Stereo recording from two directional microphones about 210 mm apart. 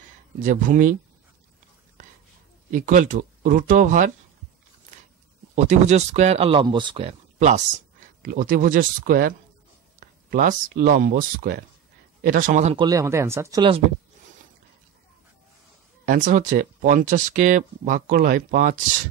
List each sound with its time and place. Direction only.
0.4 s speech: 40° right (ahead or behind)
2.7 s speech: 40° right (ahead or behind)
5.5 s speech: 35° right (ahead or behind)
12.7 s speech: 15° right (ahead or behind)
16.1 s speech: 40° right (ahead or behind)